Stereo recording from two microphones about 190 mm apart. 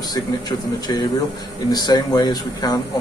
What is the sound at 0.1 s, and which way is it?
A man's voice, 20° left (ahead or behind).